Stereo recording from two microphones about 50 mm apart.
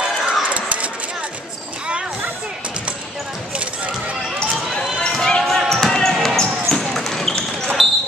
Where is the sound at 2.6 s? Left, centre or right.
Right.